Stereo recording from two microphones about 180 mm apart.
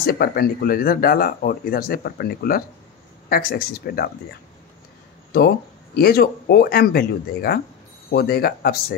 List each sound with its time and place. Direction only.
0.0 s speech: 55° left (ahead or behind)
5.9 s speech: 60° left (ahead or behind)